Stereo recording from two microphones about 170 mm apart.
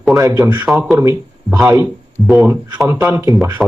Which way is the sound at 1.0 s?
20° right (ahead or behind).